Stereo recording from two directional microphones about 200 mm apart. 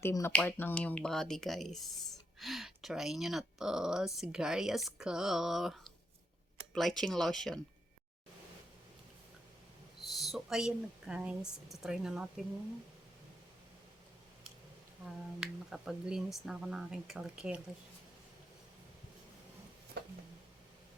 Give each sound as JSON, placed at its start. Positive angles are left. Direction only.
{"t": 0.0, "sound": "speech", "side_deg": 15}
{"t": 10.2, "sound": "speech", "side_deg": 0}
{"t": 15.0, "sound": "speech", "side_deg": -5}
{"t": 20.0, "sound": "a sound", "side_deg": -55}